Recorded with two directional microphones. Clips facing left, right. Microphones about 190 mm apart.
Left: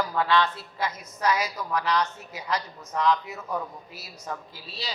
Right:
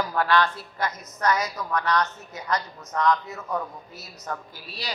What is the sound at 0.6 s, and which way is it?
Speech, 25° left (ahead or behind).